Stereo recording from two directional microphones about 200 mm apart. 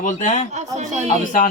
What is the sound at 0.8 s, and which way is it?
Speech, 35° right (ahead or behind).